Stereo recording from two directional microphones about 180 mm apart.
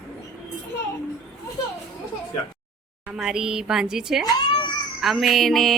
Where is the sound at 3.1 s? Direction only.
5° right (ahead or behind).